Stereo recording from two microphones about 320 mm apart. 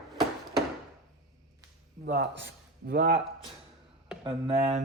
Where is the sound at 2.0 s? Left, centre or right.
Right.